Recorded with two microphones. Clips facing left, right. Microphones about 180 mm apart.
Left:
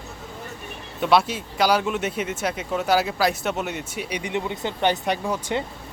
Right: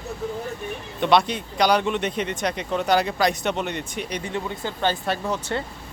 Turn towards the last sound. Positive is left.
turn(degrees=15)  # may be behind; listen again after turning